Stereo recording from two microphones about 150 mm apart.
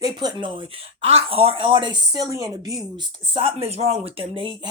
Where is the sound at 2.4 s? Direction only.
Centre (ahead or behind).